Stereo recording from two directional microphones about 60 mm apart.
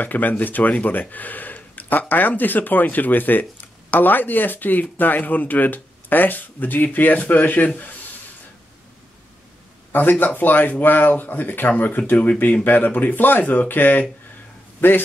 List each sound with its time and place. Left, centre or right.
0.0 s speech: left
9.9 s speech: left